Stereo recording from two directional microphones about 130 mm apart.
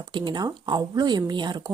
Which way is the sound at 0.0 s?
35° right (ahead or behind).